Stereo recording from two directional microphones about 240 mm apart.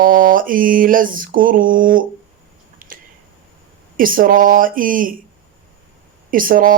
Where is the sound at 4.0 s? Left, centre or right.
Right.